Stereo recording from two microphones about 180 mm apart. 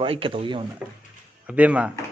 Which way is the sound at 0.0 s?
30° right (ahead or behind).